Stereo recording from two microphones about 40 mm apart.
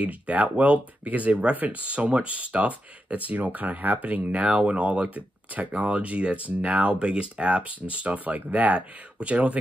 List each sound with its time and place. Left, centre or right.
0.0 s speech: right
4.3 s speech: right